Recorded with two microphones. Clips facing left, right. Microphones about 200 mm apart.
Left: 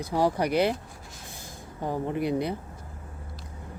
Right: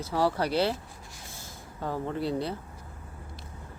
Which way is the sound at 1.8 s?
15° left (ahead or behind).